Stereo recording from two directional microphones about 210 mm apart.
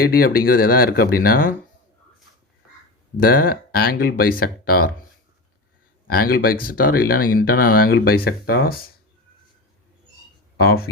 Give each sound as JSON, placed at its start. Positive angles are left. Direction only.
{"t": 0.0, "sound": "speech", "side_deg": 45}
{"t": 3.2, "sound": "speech", "side_deg": 45}
{"t": 6.1, "sound": "speech", "side_deg": 45}
{"t": 10.6, "sound": "speech", "side_deg": 45}